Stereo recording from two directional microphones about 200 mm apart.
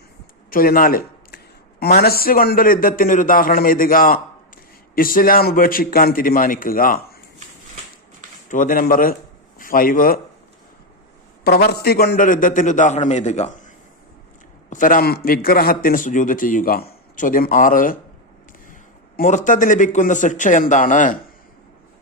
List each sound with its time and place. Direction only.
0.5 s a man's voice: 45° left (ahead or behind)
8.4 s a man's voice: 40° left (ahead or behind)
11.4 s a man's voice: 55° left (ahead or behind)